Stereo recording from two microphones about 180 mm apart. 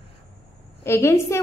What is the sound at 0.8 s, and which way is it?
Speech, 15° left (ahead or behind).